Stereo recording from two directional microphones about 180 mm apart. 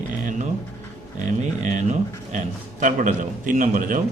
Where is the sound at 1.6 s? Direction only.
45° right (ahead or behind).